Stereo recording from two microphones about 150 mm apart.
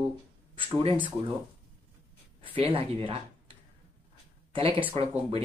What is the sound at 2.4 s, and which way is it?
Speech, 40° right (ahead or behind).